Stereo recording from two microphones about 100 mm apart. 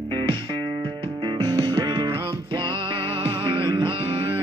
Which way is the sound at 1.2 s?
50° right (ahead or behind).